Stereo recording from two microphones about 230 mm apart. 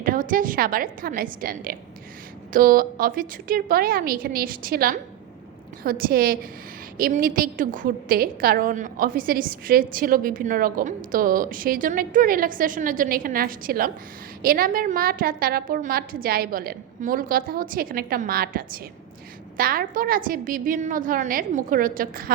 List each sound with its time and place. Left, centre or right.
0.0 s a woman's voice: right